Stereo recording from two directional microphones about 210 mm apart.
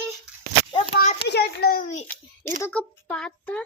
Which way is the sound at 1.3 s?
50° left (ahead or behind).